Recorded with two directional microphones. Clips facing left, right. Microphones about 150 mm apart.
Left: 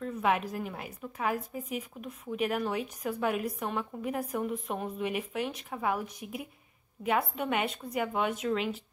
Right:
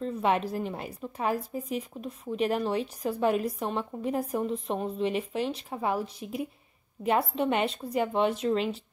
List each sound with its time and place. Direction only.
0.0 s speech: 30° right (ahead or behind)